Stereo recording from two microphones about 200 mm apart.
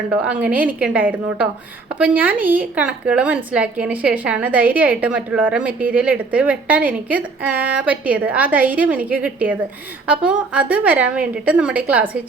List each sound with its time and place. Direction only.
0.1 s a woman's voice: 5° right (ahead or behind)